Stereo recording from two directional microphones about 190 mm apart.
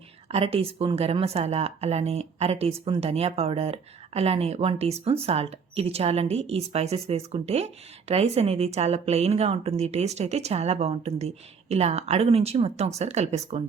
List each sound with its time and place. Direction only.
0.3 s speech: 30° right (ahead or behind)